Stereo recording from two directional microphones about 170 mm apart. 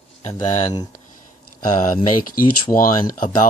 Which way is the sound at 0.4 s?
45° left (ahead or behind).